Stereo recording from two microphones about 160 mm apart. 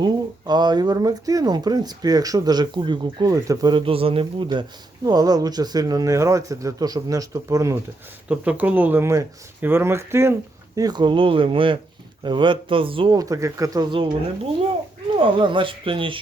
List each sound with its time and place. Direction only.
0.0 s speech: 25° right (ahead or behind)
8.3 s speech: 10° right (ahead or behind)
10.8 s speech: 25° right (ahead or behind)
13.1 s speech: 20° right (ahead or behind)
15.2 s speech: 30° right (ahead or behind)